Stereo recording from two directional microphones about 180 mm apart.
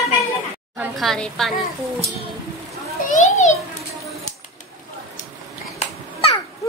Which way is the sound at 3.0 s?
45° left (ahead or behind).